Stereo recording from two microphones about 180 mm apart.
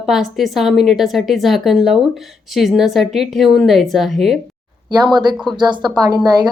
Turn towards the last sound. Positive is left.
turn(degrees=-20)  # may be behind; listen again after turning